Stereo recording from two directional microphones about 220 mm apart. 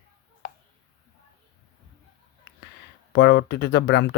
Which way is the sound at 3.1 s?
50° left (ahead or behind).